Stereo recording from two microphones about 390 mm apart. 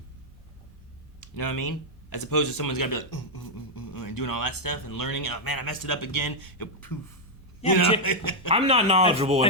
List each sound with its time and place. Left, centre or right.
1.4 s speech: left
7.6 s a man's voice: centre
8.0 s speech: left
8.4 s speech: centre